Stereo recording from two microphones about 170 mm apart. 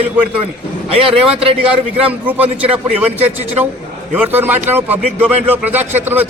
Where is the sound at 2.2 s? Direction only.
10° right (ahead or behind).